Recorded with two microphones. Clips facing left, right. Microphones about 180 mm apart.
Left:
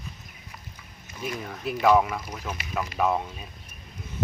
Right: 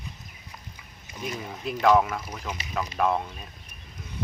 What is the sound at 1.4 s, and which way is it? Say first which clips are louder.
Speech: even; 10° right (ahead or behind).